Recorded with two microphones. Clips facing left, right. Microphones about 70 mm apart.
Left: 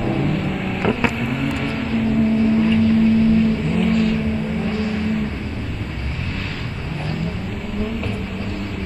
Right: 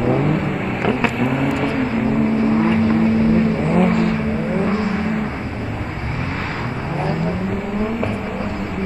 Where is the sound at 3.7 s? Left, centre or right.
Right.